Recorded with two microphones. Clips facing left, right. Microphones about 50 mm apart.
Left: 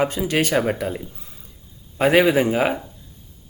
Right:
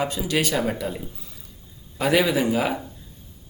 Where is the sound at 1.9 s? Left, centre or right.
Left.